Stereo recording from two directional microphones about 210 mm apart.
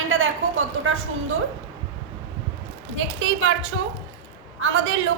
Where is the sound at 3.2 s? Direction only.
65° right (ahead or behind).